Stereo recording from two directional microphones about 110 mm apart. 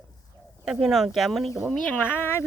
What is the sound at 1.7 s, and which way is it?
Speech, 10° left (ahead or behind).